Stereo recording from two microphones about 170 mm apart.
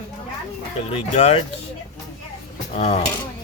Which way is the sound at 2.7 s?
40° left (ahead or behind).